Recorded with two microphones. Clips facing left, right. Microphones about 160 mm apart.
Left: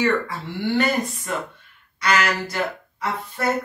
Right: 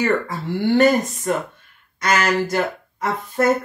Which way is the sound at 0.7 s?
45° right (ahead or behind).